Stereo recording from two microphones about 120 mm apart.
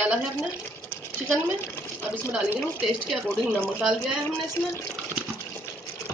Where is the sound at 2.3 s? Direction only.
5° right (ahead or behind).